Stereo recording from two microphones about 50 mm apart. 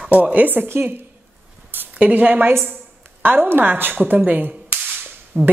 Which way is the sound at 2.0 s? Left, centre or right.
Right.